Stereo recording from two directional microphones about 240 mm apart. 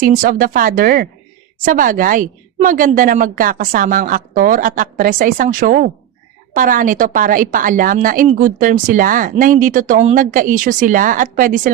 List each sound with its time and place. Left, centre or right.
0.0 s a woman's voice: right